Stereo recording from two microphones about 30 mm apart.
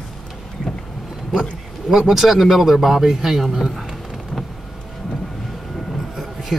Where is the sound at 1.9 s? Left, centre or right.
Centre.